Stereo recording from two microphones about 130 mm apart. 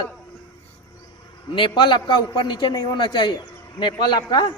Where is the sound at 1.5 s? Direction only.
40° left (ahead or behind).